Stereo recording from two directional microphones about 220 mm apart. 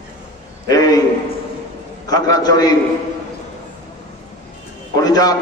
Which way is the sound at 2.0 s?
15° left (ahead or behind).